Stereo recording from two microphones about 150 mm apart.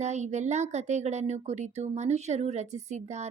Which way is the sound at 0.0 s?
50° right (ahead or behind).